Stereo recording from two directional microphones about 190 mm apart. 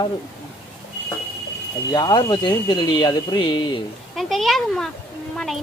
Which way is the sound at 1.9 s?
20° left (ahead or behind).